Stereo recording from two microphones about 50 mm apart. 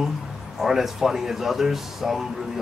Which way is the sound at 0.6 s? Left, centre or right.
Centre.